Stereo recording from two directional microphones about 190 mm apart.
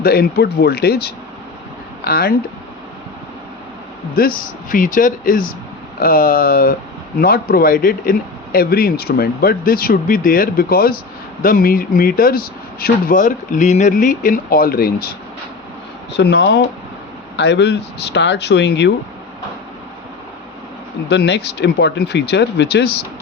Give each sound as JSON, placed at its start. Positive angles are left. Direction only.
{"t": 0.0, "sound": "speech", "side_deg": 55}
{"t": 4.1, "sound": "speech", "side_deg": 50}
{"t": 16.1, "sound": "speech", "side_deg": 65}
{"t": 21.1, "sound": "speech", "side_deg": 60}